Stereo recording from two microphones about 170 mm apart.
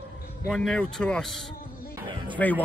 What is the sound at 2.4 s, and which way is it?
Speech, 10° left (ahead or behind).